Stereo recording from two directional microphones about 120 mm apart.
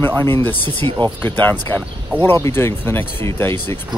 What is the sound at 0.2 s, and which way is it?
Speech, 15° left (ahead or behind).